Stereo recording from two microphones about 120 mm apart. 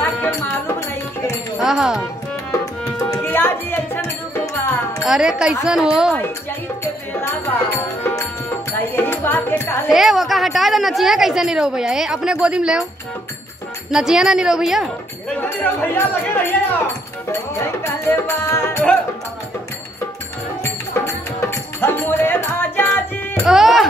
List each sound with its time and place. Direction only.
0.0 s music: 15° left (ahead or behind)
1.6 s speech: 5° right (ahead or behind)
2.6 s music: 25° left (ahead or behind)
5.0 s a woman's voice: 5° right (ahead or behind)
6.8 s music: 20° left (ahead or behind)
9.8 s a woman's voice: centre (ahead or behind)
13.9 s a woman's voice: 5° right (ahead or behind)
15.3 s speech: 15° left (ahead or behind)
17.3 s music: 20° left (ahead or behind)
21.0 s music: 25° left (ahead or behind)
23.4 s speech: centre (ahead or behind)